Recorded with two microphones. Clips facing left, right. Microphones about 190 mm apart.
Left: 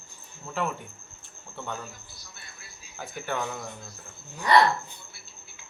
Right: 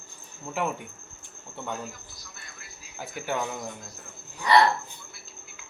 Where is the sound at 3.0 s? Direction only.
10° right (ahead or behind).